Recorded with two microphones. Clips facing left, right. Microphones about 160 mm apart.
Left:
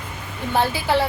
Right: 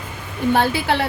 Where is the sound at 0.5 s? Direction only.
65° right (ahead or behind).